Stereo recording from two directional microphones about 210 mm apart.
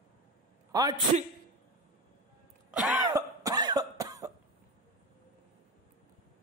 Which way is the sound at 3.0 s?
15° right (ahead or behind).